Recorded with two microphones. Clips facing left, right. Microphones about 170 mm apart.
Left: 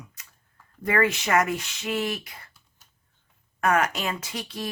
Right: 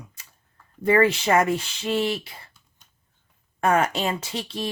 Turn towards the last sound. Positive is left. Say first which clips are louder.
# right 3 dB
turn(degrees=-30)  # may be behind; listen again after turning